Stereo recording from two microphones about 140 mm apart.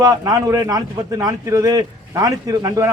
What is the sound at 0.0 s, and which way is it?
A man's voice, 25° right (ahead or behind).